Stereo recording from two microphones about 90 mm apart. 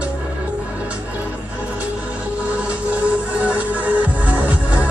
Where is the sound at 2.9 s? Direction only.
15° right (ahead or behind).